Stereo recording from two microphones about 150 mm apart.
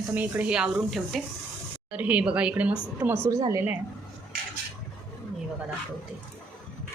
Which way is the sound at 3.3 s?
20° right (ahead or behind).